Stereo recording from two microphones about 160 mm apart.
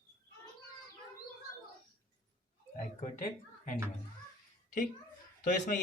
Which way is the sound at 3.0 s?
55° left (ahead or behind).